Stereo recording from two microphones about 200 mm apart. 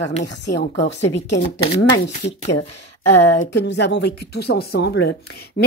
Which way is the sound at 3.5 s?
60° left (ahead or behind).